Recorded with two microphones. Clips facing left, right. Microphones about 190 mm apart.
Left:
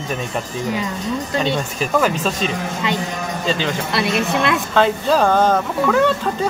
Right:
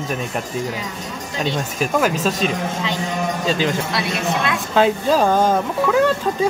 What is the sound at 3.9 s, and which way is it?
Speech, 60° left (ahead or behind).